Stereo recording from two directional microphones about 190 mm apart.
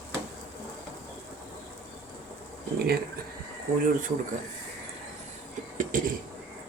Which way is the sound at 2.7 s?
55° right (ahead or behind).